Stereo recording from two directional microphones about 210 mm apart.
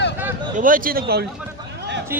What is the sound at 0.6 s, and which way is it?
Speech, 40° right (ahead or behind).